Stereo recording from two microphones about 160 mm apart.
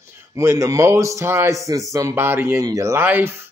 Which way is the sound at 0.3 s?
20° right (ahead or behind).